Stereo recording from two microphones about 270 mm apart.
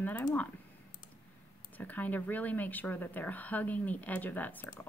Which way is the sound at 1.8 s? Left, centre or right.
Centre.